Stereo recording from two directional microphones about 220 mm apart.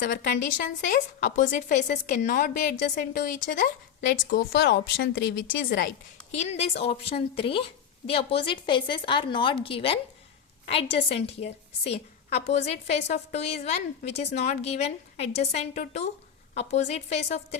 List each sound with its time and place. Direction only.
0.0 s a woman's voice: 45° left (ahead or behind)
6.3 s a woman's voice: 30° left (ahead or behind)